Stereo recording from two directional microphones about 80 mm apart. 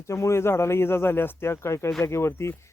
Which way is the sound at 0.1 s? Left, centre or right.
Left.